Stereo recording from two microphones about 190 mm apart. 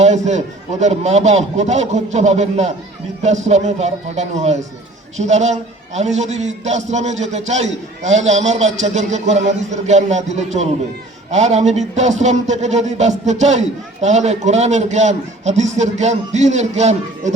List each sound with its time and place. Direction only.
0.0 s speech: 40° right (ahead or behind)